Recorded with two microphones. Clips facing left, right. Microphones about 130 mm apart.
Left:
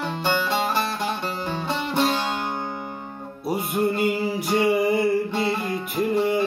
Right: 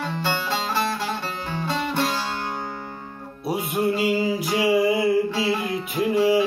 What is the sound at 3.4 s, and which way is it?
Music, centre (ahead or behind).